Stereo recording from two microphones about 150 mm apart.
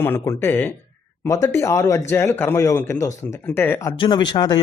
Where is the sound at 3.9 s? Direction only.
30° left (ahead or behind).